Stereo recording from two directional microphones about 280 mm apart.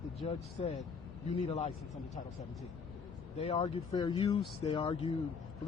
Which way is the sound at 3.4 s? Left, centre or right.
Centre.